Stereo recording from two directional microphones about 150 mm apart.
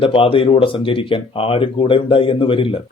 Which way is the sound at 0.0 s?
35° left (ahead or behind).